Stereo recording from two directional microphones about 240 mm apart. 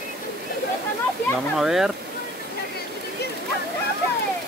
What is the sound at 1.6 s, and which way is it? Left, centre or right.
Speech, centre.